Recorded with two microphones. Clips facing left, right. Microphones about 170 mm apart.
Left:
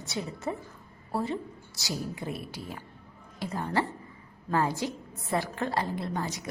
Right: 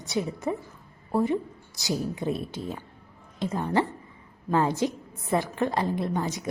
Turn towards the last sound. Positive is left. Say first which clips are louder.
# right 5 dB
turn(degrees=-20)  # may be behind; listen again after turning